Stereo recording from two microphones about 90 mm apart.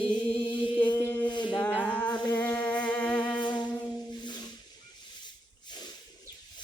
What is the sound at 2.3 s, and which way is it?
Humming, 20° left (ahead or behind).